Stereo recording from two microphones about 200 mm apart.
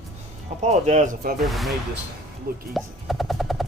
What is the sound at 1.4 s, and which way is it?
Speech, centre (ahead or behind).